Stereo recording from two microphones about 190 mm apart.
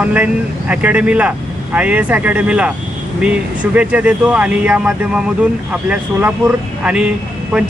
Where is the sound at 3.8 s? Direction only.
5° right (ahead or behind).